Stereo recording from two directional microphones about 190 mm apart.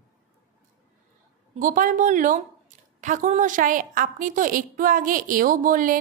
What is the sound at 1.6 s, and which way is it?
A woman's voice, 45° right (ahead or behind).